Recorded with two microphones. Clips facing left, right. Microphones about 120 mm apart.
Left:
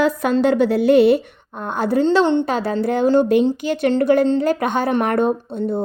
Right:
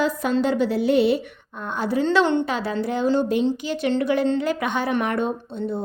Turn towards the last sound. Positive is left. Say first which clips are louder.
# left 6 dB
turn(degrees=50)  # may be behind; listen again after turning